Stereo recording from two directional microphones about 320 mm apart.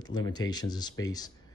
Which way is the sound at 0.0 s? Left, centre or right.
Centre.